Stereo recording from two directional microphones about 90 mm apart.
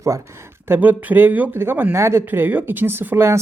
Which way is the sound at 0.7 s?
25° right (ahead or behind).